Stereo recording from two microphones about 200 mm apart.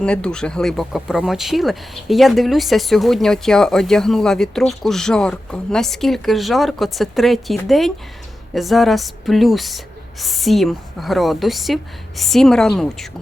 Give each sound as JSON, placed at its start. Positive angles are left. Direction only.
{"t": 0.0, "sound": "speech", "side_deg": 5}